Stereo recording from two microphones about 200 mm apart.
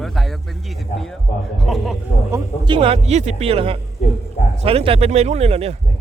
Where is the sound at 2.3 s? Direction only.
20° right (ahead or behind).